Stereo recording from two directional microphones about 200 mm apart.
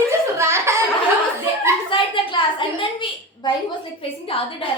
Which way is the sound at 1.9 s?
25° left (ahead or behind).